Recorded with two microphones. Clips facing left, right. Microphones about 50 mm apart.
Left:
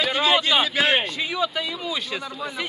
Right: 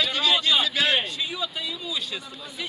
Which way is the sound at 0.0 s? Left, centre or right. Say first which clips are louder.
Left 3 dB; left.